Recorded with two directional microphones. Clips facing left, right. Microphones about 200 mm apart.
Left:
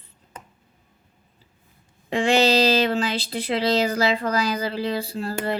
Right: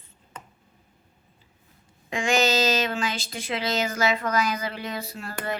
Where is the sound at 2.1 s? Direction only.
35° left (ahead or behind).